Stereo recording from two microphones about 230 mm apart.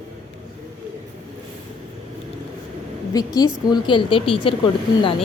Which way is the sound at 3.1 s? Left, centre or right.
Centre.